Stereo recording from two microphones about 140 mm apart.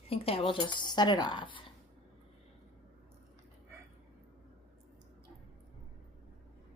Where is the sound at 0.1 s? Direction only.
40° left (ahead or behind).